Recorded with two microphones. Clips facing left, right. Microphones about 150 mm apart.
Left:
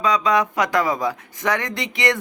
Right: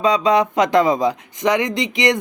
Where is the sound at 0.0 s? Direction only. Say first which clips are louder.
Right 3 dB; 25° right (ahead or behind).